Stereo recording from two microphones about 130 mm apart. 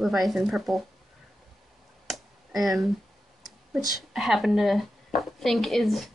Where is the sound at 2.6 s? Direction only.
Centre (ahead or behind).